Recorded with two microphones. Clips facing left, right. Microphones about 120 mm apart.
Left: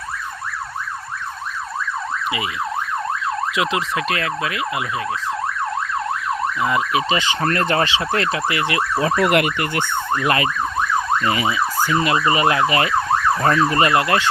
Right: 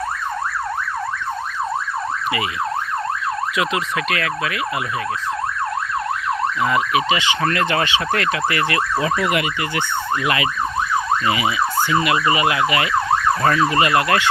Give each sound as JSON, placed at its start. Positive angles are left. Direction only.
{"t": 3.6, "sound": "emergency vehicle", "side_deg": 25}
{"t": 6.9, "sound": "emergency vehicle", "side_deg": 35}
{"t": 9.2, "sound": "emergency vehicle", "side_deg": 55}
{"t": 10.2, "sound": "emergency vehicle", "side_deg": 40}
{"t": 13.9, "sound": "emergency vehicle", "side_deg": 25}